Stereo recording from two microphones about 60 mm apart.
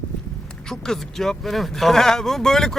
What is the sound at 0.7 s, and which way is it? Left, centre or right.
Speech, centre.